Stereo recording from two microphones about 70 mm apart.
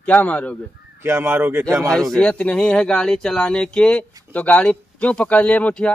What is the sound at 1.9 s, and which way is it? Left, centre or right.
Speech, centre.